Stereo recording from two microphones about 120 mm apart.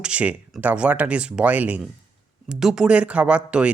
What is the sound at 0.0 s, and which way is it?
Speech, 10° right (ahead or behind).